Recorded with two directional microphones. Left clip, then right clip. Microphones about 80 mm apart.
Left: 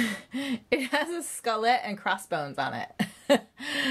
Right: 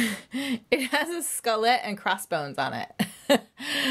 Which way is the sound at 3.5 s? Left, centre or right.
Right.